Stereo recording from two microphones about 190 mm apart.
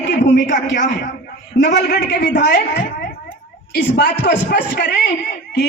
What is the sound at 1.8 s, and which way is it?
Speech, 60° left (ahead or behind).